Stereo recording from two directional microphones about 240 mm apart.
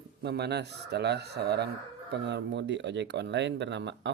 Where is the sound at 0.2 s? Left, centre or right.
Right.